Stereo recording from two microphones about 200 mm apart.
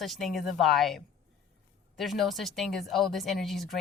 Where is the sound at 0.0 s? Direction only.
Centre (ahead or behind).